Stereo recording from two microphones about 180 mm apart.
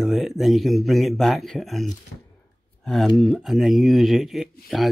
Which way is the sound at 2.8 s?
Centre (ahead or behind).